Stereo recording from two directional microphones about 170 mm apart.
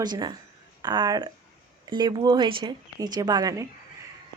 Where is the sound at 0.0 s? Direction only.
25° right (ahead or behind).